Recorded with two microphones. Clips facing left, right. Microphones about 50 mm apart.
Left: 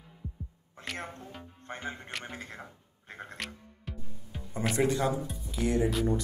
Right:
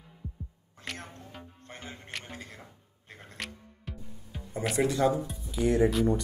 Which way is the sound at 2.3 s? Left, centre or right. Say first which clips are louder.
Left 2 dB; left.